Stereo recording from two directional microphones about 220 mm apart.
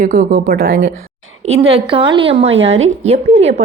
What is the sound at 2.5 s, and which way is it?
Speech, 60° right (ahead or behind).